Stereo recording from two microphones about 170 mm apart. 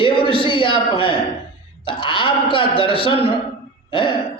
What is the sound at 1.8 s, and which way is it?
A man's voice, 30° left (ahead or behind).